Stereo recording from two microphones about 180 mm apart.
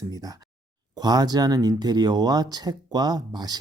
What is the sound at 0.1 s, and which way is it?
Speech, 20° right (ahead or behind).